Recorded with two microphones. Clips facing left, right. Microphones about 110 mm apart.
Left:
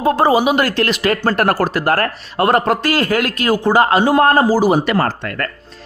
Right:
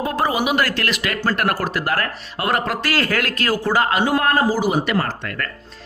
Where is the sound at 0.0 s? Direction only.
30° left (ahead or behind).